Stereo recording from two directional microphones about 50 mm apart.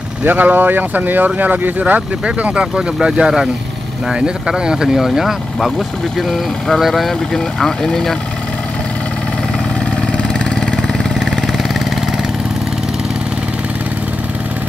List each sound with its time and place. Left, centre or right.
0.2 s speech: right; by 8.2 s centre
10.8 s vehicle: centre